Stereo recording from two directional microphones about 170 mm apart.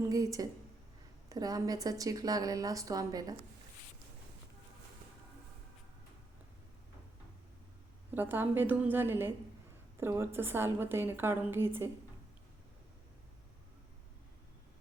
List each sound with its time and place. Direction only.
0.0 s a woman's voice: 20° right (ahead or behind)
8.1 s a woman's voice: 10° right (ahead or behind)